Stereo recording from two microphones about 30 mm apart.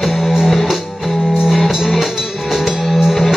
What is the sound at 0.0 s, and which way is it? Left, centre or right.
Music, centre.